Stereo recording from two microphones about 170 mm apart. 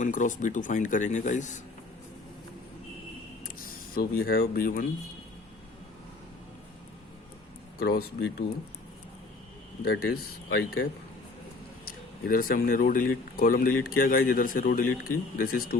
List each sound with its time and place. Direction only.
0.0 s speech: 50° left (ahead or behind)
3.4 s speech: 60° left (ahead or behind)
7.8 s speech: 65° left (ahead or behind)
9.8 s speech: 70° left (ahead or behind)
11.9 s speech: 55° left (ahead or behind)